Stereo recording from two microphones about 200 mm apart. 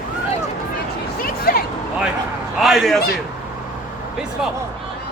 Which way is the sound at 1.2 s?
50° left (ahead or behind).